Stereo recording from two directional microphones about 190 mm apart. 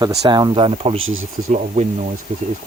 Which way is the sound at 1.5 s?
40° right (ahead or behind).